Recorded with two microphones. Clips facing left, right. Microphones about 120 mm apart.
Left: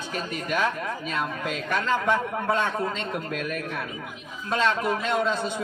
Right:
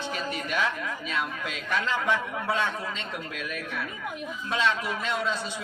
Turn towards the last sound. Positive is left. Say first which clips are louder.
# left 5 dB
turn(degrees=50)  # may be behind; listen again after turning